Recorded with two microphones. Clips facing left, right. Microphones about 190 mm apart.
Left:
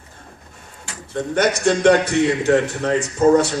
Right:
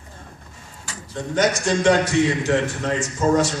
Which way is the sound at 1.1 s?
60° left (ahead or behind).